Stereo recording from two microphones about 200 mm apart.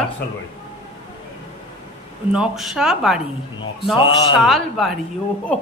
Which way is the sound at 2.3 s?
Centre (ahead or behind).